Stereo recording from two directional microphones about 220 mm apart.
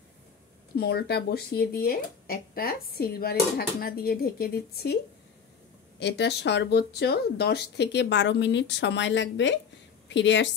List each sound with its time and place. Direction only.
0.7 s speech: 45° left (ahead or behind)
5.9 s a woman's voice: 50° left (ahead or behind)